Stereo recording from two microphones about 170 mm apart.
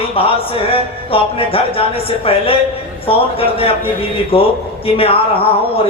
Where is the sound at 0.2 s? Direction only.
35° left (ahead or behind).